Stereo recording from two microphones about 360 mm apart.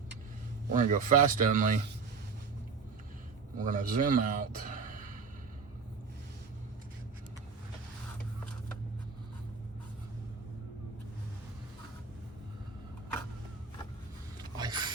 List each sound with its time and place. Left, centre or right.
0.7 s speech: right
3.6 s speech: right
14.6 s a sound: centre